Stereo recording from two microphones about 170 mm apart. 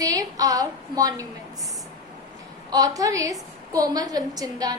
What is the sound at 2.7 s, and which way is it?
A woman's voice, 20° right (ahead or behind).